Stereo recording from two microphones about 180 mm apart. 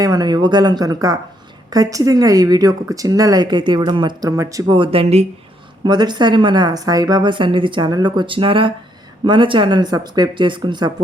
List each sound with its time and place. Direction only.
0.0 s speech: 20° right (ahead or behind)
4.7 s speech: 30° right (ahead or behind)